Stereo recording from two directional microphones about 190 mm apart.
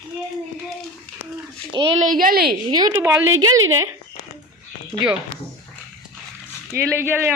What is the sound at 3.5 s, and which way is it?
Speech, 90° right.